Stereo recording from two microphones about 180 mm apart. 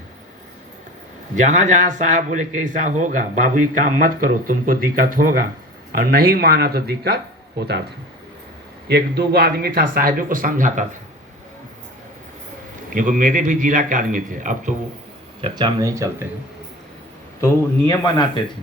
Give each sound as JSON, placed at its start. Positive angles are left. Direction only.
{"t": 1.4, "sound": "speech", "side_deg": -45}
{"t": 8.9, "sound": "speech", "side_deg": -60}
{"t": 12.9, "sound": "speech", "side_deg": -45}
{"t": 15.4, "sound": "speech", "side_deg": -30}
{"t": 17.4, "sound": "a man's voice", "side_deg": 20}